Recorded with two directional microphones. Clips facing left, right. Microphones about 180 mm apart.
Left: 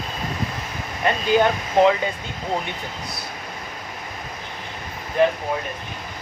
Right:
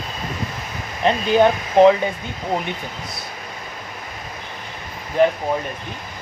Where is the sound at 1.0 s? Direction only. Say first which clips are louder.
Right 3 dB; 20° right (ahead or behind).